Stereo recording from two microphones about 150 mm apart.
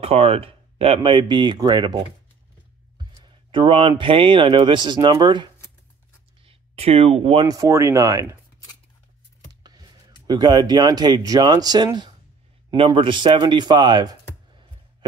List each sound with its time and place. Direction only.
0.0 s speech: 45° right (ahead or behind)
3.3 s speech: 35° right (ahead or behind)
6.4 s speech: 45° right (ahead or behind)
7.4 s speech: 20° right (ahead or behind)
9.5 s speech: 25° right (ahead or behind)